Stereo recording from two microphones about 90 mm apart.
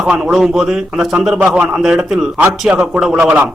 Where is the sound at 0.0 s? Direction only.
5° right (ahead or behind).